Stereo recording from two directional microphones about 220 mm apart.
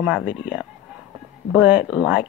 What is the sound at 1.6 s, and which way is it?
Speech, 5° right (ahead or behind).